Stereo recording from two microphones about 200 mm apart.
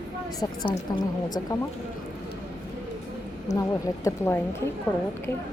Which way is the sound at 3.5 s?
35° left (ahead or behind).